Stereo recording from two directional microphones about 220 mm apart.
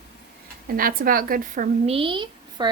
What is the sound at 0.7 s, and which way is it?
A woman's voice, 40° right (ahead or behind).